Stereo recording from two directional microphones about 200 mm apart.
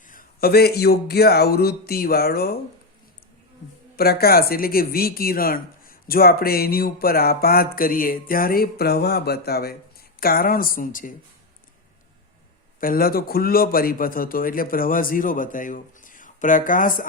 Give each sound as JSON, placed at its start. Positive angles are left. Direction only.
{"t": 0.1, "sound": "speech", "side_deg": 45}
{"t": 3.9, "sound": "speech", "side_deg": 50}
{"t": 12.8, "sound": "speech", "side_deg": 45}